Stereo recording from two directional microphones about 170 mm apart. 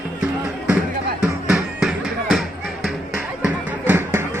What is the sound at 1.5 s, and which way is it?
Music, centre (ahead or behind).